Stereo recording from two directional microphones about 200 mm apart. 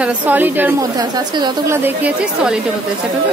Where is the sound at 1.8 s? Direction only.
5° right (ahead or behind).